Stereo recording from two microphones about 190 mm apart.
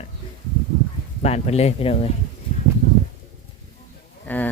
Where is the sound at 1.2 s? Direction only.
35° left (ahead or behind).